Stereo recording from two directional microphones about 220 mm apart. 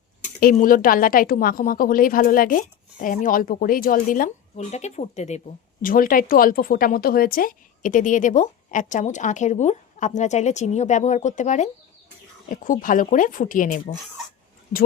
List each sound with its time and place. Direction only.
0.3 s speech: 40° left (ahead or behind)